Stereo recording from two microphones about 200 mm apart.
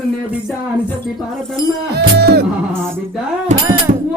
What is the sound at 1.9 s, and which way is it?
Music, 55° right (ahead or behind).